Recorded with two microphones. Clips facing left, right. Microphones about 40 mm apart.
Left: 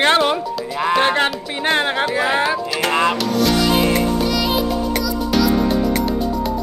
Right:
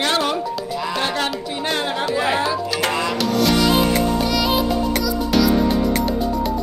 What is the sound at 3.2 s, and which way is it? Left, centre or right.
Music, centre.